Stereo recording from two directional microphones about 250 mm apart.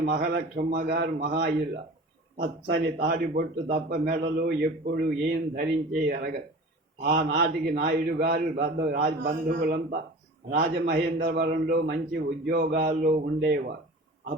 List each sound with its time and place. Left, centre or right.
0.0 s a man's voice: right